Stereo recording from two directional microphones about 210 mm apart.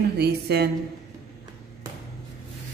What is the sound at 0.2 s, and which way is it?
Speech, 50° right (ahead or behind).